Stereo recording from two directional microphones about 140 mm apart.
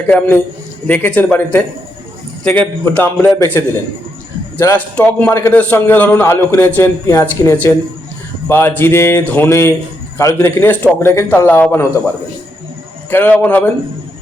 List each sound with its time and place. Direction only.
0.1 s a man's voice: 10° left (ahead or behind)
2.6 s a man's voice: 10° left (ahead or behind)
4.6 s speech: 20° left (ahead or behind)
4.9 s a man's voice: 10° left (ahead or behind)